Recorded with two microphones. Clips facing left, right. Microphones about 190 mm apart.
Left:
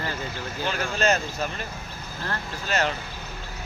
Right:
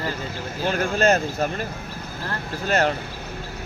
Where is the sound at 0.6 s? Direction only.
50° right (ahead or behind).